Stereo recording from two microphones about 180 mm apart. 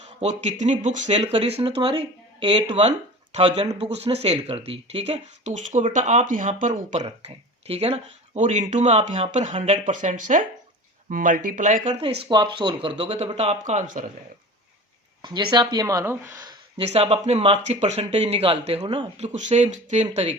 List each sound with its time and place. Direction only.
0.2 s speech: 40° right (ahead or behind)
12.3 s speech: 25° right (ahead or behind); by 14.1 s 45° right (ahead or behind)
15.2 s speech: 25° right (ahead or behind)
16.9 s speech: 35° right (ahead or behind)